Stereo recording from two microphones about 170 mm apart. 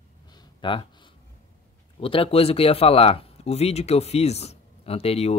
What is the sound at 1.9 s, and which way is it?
Speech, 35° left (ahead or behind).